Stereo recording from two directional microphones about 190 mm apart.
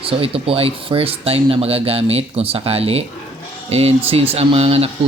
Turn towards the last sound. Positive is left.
turn(degrees=-30)  # may be behind; listen again after turning